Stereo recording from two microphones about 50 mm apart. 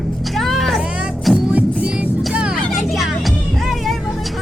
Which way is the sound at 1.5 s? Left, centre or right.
Right.